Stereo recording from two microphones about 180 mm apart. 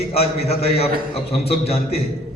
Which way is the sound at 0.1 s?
35° left (ahead or behind).